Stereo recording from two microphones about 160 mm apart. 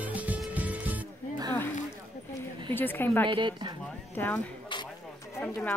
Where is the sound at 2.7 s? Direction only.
10° left (ahead or behind).